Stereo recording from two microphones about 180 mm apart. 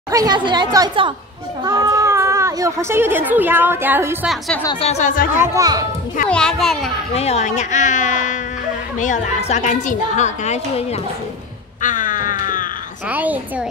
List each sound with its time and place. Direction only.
0.1 s speech: 20° right (ahead or behind)
4.7 s a woman's voice: 35° left (ahead or behind)
5.4 s speech: 15° right (ahead or behind)
6.2 s a child's voice: 5° left (ahead or behind)
7.2 s speech: 35° left (ahead or behind)
9.5 s a woman's voice: 40° left (ahead or behind)
11.8 s cat: 45° left (ahead or behind)
13.1 s a child's voice: 10° right (ahead or behind)